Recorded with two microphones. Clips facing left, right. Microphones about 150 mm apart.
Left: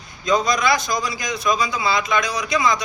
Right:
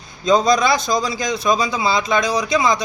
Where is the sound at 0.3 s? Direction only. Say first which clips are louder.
Right 4 dB; 30° right (ahead or behind).